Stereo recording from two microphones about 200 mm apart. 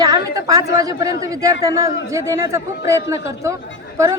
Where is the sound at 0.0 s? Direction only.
20° right (ahead or behind).